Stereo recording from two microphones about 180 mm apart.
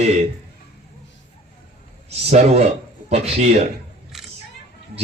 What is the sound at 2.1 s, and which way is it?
A man's voice, 35° right (ahead or behind).